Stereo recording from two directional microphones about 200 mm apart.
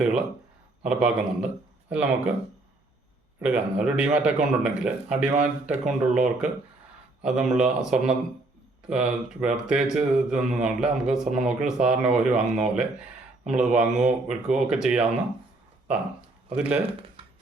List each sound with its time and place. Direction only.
0.0 s a sound: 5° right (ahead or behind)
0.8 s a man's voice: 5° right (ahead or behind)
3.4 s a man's voice: 5° right (ahead or behind)
5.7 s speech: 40° right (ahead or behind)
7.2 s a man's voice: 5° right (ahead or behind)